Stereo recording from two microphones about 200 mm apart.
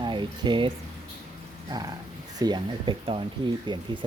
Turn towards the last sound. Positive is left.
turn(degrees=-25)  # may be behind; listen again after turning